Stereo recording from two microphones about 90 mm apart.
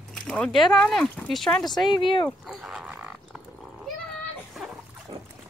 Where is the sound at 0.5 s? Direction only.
5° left (ahead or behind).